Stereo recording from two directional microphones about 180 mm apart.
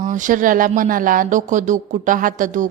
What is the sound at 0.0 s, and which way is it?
Speech, 45° right (ahead or behind).